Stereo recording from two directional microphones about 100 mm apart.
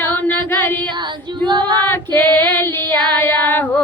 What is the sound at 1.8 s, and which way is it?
Female singing, 20° left (ahead or behind).